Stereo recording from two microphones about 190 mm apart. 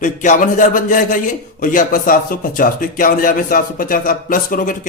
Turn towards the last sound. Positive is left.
turn(degrees=45)  # may be behind; listen again after turning